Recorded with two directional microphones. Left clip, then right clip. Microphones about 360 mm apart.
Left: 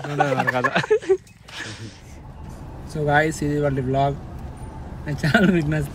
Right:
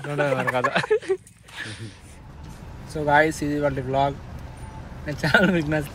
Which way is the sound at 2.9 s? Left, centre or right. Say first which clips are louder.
Right 1 dB; centre.